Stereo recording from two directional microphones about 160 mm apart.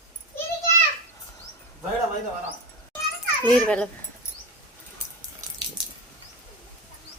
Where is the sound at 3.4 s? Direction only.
10° left (ahead or behind).